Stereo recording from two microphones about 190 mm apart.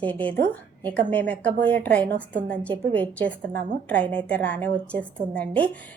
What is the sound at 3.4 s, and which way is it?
Speech, 65° right (ahead or behind).